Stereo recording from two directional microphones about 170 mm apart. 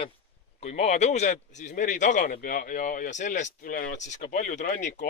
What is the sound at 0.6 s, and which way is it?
Speech, 40° left (ahead or behind).